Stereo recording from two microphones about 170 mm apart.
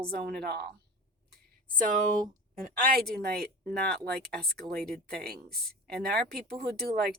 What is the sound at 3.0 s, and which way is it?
Speech, 5° left (ahead or behind).